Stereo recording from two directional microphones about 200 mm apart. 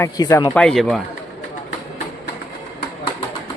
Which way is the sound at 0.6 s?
Centre (ahead or behind).